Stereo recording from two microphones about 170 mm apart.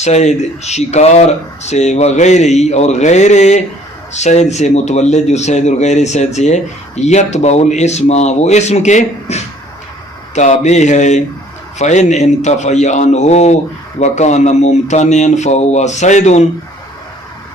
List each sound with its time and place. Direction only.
0.0 s speech: 40° left (ahead or behind)